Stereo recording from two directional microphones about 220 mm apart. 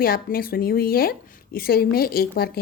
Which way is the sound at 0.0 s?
40° left (ahead or behind).